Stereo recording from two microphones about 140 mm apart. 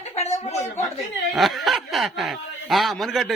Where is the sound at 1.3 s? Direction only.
Centre (ahead or behind).